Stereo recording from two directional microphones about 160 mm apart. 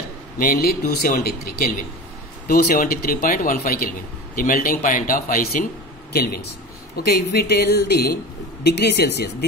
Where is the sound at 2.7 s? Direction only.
60° left (ahead or behind).